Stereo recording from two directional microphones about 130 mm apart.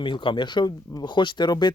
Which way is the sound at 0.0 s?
35° left (ahead or behind).